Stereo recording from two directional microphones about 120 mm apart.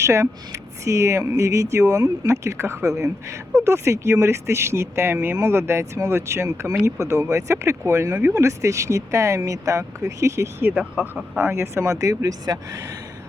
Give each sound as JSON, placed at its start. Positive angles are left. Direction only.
{"t": 0.0, "sound": "speech", "side_deg": -25}